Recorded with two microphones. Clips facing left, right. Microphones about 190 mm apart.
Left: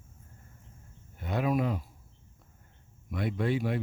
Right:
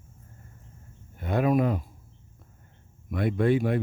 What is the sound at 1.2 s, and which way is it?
Speech, 50° right (ahead or behind).